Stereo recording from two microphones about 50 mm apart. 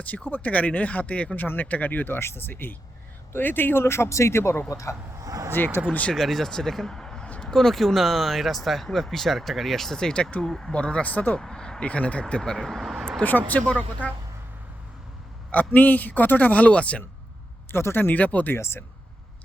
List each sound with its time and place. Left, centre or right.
0.0 s speech: left
1.4 s speech: left
2.1 s speech: left
4.7 s speech: left
5.6 s speech: left
6.1 s speech: centre
11.0 s speech: left
11.3 s speech: centre
12.4 s speech: centre
13.2 s speech: left
15.5 s speech: left
17.7 s speech: left
18.1 s speech: left
18.5 s speech: left